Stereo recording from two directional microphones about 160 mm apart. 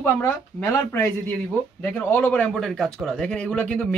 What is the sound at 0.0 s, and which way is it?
Speech, 15° left (ahead or behind).